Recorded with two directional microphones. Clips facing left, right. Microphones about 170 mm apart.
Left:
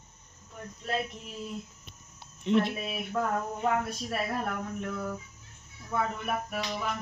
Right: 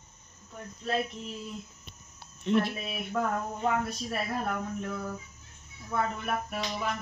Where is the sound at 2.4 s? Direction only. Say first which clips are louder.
Left 1 dB; 20° left (ahead or behind).